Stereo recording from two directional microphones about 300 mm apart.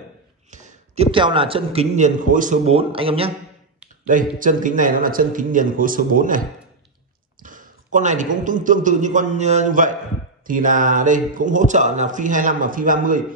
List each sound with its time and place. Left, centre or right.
0.5 s speech: right
7.4 s a man's voice: right